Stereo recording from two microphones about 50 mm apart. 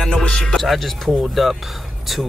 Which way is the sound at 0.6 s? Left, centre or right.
Centre.